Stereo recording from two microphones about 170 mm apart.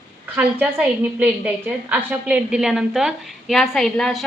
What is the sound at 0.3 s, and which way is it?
A woman's voice, 10° right (ahead or behind).